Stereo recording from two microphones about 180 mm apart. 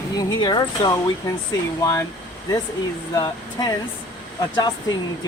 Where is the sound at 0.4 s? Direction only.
25° left (ahead or behind).